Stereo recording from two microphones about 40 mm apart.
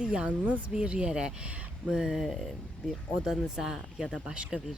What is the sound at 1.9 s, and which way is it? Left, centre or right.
Speech, centre.